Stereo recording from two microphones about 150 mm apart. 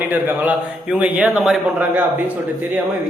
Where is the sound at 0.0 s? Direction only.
10° right (ahead or behind).